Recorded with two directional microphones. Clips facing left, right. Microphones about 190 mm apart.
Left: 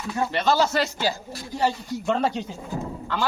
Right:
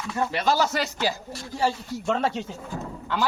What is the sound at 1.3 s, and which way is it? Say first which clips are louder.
A man's voice: left 1 dB; centre (ahead or behind).